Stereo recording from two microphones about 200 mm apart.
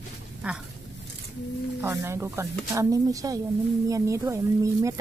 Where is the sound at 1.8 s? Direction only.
15° right (ahead or behind).